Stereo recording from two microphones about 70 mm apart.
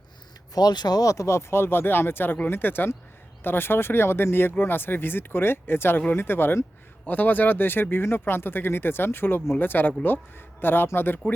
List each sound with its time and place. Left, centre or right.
0.5 s speech: left